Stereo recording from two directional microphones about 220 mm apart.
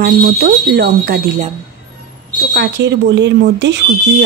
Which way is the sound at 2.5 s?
50° right (ahead or behind).